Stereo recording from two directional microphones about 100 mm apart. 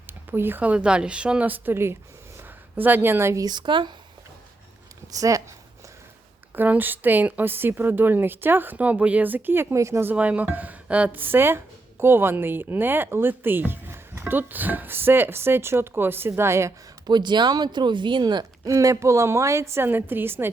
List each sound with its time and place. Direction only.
0.1 s speech: 20° right (ahead or behind)
3.4 s speech: 45° right (ahead or behind)
5.1 s speech: 35° right (ahead or behind)
6.5 s a woman's voice: 20° right (ahead or behind)
17.1 s speech: 50° right (ahead or behind)
18.7 s a woman's voice: 30° right (ahead or behind)